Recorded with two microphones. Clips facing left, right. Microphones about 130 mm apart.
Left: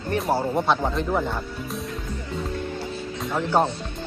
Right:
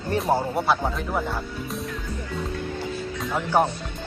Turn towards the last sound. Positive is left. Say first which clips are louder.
# even
turn(degrees=-10)  # may be behind; listen again after turning